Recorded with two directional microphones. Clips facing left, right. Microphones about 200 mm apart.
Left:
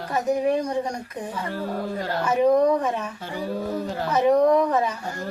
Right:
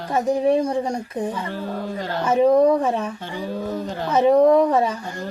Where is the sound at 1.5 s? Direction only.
10° left (ahead or behind).